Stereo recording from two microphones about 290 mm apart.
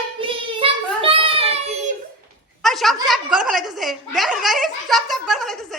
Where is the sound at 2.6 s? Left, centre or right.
Centre.